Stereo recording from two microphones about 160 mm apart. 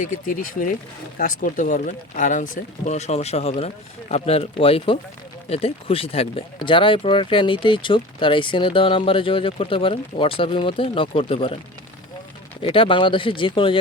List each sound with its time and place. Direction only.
0.0 s speech: 60° left (ahead or behind); by 11.5 s 35° left (ahead or behind)
12.6 s speech: 35° left (ahead or behind)